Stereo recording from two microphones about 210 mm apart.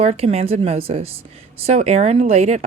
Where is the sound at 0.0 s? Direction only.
30° right (ahead or behind).